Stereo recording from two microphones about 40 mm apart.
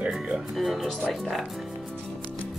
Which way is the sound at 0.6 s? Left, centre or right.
Centre.